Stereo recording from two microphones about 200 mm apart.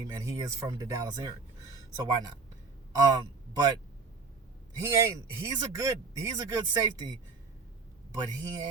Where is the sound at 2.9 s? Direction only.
20° right (ahead or behind).